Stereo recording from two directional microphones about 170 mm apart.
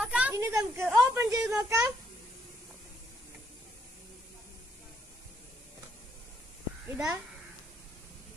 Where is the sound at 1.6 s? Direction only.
15° right (ahead or behind).